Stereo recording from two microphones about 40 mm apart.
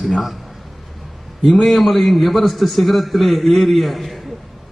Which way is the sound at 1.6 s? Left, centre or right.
Centre.